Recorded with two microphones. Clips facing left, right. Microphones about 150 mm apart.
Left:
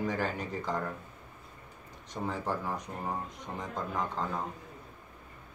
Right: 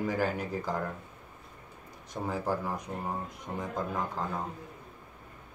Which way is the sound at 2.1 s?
10° right (ahead or behind).